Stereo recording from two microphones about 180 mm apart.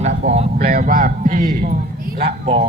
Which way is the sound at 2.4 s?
30° right (ahead or behind).